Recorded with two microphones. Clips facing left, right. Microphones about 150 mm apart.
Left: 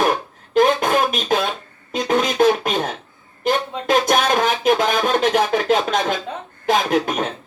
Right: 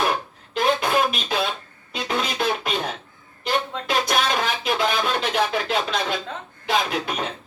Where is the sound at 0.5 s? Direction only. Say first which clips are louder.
Left 5 dB; 45° left (ahead or behind).